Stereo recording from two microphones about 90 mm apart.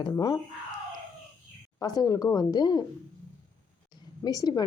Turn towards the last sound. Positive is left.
turn(degrees=45)  # may be behind; listen again after turning